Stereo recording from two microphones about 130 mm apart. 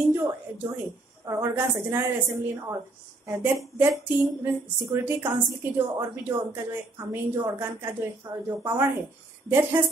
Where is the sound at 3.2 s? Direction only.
15° right (ahead or behind).